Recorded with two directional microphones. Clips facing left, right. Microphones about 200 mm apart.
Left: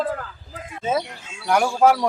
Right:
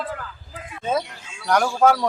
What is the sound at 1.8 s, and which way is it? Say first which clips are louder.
Speech: left 1 dB; 10° left (ahead or behind).